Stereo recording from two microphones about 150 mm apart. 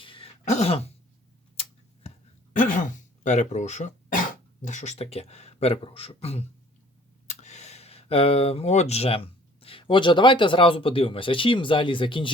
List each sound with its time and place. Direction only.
0.0 s throat clearing: 35° left (ahead or behind)
0.4 s throat clearing: 45° left (ahead or behind)
2.6 s speech: 60° left (ahead or behind); by 12.3 s 35° left (ahead or behind)